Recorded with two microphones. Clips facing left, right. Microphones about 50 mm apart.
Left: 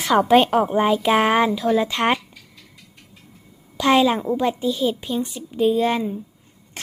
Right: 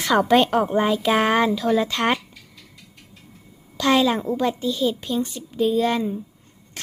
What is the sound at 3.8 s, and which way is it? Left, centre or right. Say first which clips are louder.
A woman's voice: left 2 dB; centre.